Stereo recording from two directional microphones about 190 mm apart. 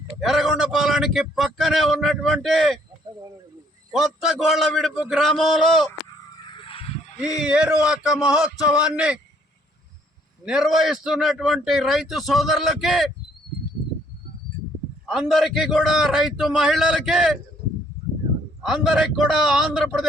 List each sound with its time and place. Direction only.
0.2 s a man's voice: centre (ahead or behind)
3.9 s a man's voice: centre (ahead or behind)
6.3 s a sound: 25° left (ahead or behind)
7.2 s a man's voice: 5° right (ahead or behind)
10.4 s a man's voice: centre (ahead or behind)
15.0 s a man's voice: centre (ahead or behind)
18.6 s a man's voice: 5° right (ahead or behind)